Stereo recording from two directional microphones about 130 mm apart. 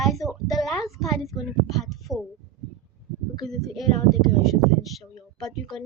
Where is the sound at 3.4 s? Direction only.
Centre (ahead or behind).